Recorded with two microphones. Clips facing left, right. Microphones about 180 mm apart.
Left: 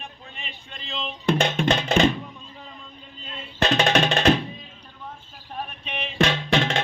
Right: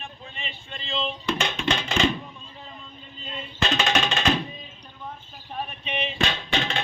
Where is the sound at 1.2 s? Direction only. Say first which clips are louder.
Left 8 dB; 55° left (ahead or behind).